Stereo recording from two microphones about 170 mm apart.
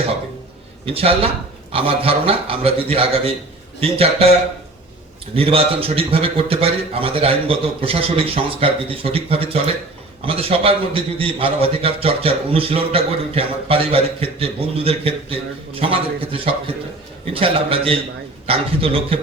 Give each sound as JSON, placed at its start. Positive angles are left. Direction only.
{"t": 0.9, "sound": "a man's voice", "side_deg": -35}